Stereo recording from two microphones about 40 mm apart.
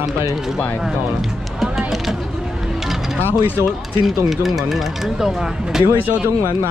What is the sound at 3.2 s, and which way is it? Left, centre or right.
Speech, left.